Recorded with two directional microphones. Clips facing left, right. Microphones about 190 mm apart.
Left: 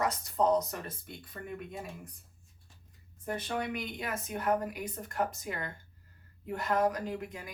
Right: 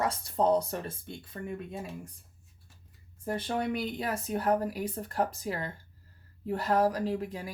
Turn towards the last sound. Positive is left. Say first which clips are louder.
# right 5 dB
turn(degrees=-35)  # may be behind; listen again after turning